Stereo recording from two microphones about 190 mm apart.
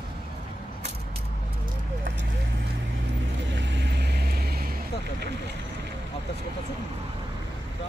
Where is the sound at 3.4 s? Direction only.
70° right (ahead or behind).